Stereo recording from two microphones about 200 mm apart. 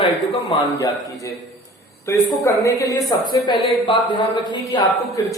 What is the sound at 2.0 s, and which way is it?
A woman's voice, 15° left (ahead or behind).